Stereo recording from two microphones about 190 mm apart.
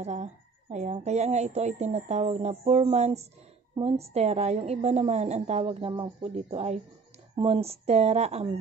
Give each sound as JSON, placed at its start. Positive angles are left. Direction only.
{"t": 0.0, "sound": "a woman's voice", "side_deg": -35}